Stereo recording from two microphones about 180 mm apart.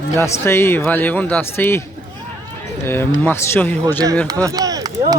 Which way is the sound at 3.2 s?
10° left (ahead or behind).